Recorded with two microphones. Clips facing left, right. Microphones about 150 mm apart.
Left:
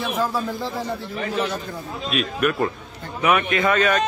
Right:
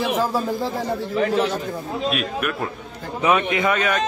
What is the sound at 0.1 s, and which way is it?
Speech, 30° right (ahead or behind).